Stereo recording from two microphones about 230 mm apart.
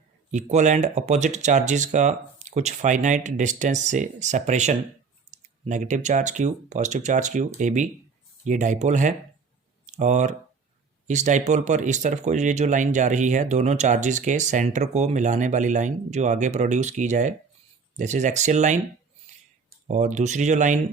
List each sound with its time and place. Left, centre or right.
0.3 s speech: right
19.9 s speech: right